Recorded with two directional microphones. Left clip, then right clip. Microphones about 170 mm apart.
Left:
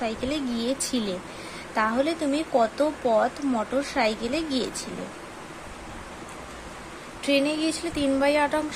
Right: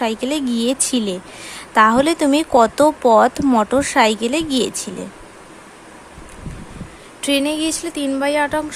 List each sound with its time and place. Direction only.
0.0 s speech: 35° right (ahead or behind)
7.2 s speech: 35° right (ahead or behind)